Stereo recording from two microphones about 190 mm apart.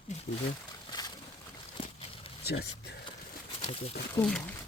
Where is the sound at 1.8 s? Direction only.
30° left (ahead or behind).